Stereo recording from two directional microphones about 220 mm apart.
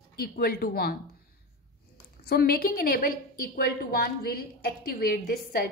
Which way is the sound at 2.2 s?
45° left (ahead or behind).